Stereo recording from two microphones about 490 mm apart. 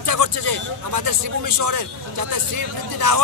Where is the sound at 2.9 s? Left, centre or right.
Right.